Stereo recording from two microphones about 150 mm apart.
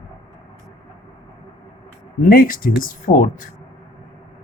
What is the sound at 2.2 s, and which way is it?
Speech, 70° left (ahead or behind).